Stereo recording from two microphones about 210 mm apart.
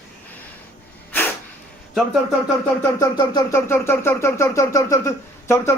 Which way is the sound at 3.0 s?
15° left (ahead or behind).